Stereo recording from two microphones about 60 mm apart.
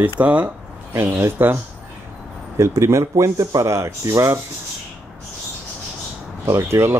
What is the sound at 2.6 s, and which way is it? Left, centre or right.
Speech, right.